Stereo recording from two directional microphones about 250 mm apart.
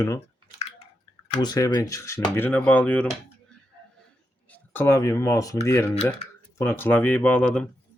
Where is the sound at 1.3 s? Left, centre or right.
Centre.